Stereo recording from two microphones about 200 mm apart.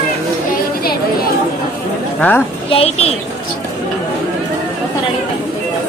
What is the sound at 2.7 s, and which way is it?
Speech, 30° left (ahead or behind).